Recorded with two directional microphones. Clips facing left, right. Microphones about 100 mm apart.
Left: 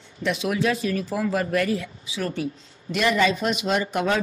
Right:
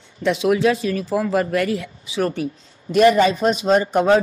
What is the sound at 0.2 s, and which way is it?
Speech, 30° right (ahead or behind).